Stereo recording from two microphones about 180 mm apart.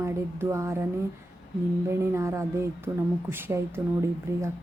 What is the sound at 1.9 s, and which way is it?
Speech, 15° right (ahead or behind).